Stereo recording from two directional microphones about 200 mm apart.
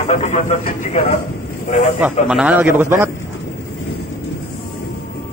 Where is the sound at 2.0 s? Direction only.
5° right (ahead or behind).